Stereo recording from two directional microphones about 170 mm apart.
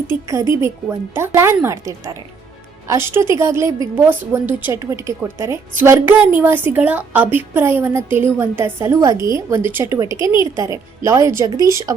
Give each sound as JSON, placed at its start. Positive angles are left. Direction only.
{"t": 0.3, "sound": "a woman's voice", "side_deg": -15}